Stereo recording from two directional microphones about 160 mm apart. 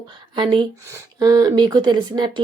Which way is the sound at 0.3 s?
30° right (ahead or behind).